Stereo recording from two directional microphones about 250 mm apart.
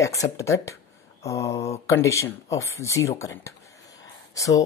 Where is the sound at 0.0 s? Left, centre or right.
Centre.